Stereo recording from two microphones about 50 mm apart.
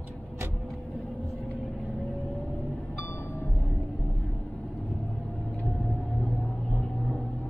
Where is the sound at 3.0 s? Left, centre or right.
Left.